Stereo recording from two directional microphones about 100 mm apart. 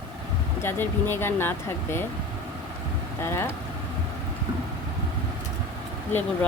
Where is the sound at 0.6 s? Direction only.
20° left (ahead or behind).